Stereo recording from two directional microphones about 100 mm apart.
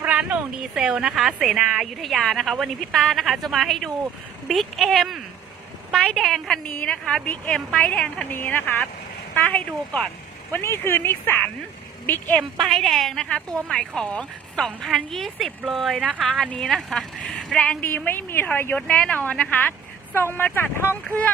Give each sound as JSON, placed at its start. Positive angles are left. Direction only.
{"t": 0.0, "sound": "a sound", "side_deg": -15}
{"t": 1.3, "sound": "a woman's voice", "side_deg": -5}
{"t": 10.5, "sound": "speech", "side_deg": 25}
{"t": 12.6, "sound": "a woman's voice", "side_deg": 0}